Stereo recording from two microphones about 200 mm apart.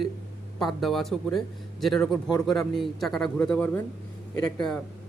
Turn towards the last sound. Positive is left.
turn(degrees=5)  # may be behind; listen again after turning